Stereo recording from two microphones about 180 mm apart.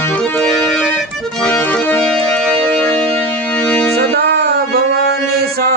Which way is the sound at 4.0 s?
60° right (ahead or behind).